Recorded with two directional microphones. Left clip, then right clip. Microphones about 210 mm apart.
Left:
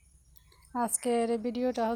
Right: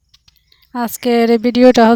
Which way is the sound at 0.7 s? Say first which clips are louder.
Right 13 dB; 50° right (ahead or behind).